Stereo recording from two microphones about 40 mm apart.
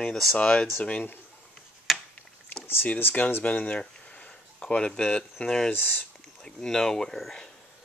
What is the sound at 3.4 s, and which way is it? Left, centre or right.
Speech, left.